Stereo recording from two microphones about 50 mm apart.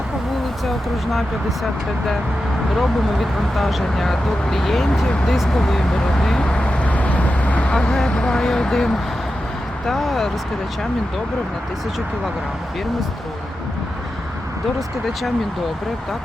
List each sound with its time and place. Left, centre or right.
2.7 s speech: centre
5.4 s vehicle: centre; by 7.7 s left
7.7 s speech: centre
14.8 s speech: centre